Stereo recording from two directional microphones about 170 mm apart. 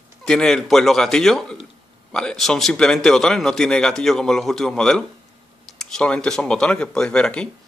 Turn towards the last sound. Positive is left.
turn(degrees=5)  # may be behind; listen again after turning